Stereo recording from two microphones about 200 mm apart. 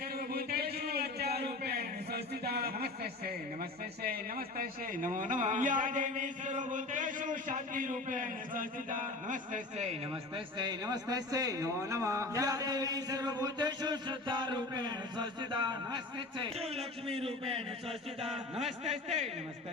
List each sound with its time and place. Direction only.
0.2 s speech: 50° right (ahead or behind)
10.3 s a man's voice: 20° right (ahead or behind)